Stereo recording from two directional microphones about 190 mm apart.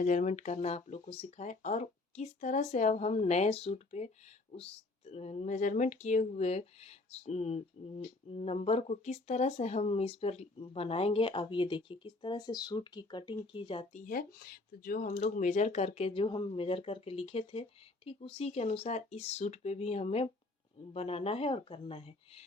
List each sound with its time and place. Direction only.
0.0 s speech: 40° left (ahead or behind)
14.0 s speech: 50° left (ahead or behind); by 22.4 s 30° left (ahead or behind)